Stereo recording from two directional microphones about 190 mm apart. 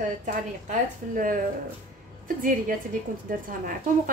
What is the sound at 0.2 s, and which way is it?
A woman's voice, 45° right (ahead or behind).